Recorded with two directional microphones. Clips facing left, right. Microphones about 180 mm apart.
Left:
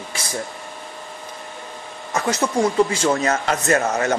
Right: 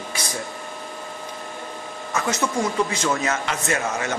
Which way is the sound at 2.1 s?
35° left (ahead or behind).